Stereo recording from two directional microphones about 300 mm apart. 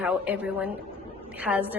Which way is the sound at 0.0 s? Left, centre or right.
Centre.